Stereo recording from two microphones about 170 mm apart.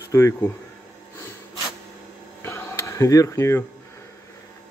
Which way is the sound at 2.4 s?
15° left (ahead or behind).